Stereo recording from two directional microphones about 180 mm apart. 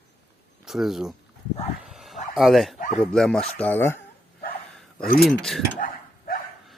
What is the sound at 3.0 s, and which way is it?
Speech, 5° left (ahead or behind).